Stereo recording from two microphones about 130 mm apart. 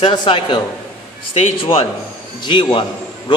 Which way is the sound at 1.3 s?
50° left (ahead or behind).